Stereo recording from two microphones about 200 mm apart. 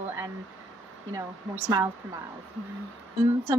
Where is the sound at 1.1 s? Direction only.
15° right (ahead or behind).